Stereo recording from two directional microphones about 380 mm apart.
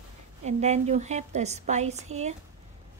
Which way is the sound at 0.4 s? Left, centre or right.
Centre.